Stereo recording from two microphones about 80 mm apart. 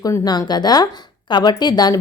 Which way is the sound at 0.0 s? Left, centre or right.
Left.